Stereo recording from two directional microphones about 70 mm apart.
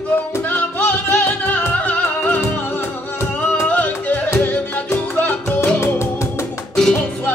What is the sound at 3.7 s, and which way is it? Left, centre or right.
Music, left.